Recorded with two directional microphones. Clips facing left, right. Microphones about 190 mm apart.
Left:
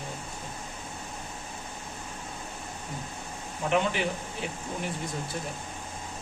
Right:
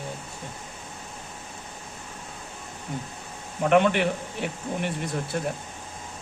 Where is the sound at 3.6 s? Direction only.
65° right (ahead or behind).